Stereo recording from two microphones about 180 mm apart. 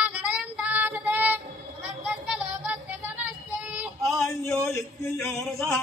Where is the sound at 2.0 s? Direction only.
5° right (ahead or behind).